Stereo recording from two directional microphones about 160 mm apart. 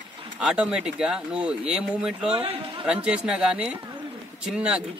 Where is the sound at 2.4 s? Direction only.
35° right (ahead or behind).